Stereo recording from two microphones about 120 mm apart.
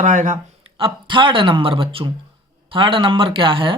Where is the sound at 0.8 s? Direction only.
45° right (ahead or behind).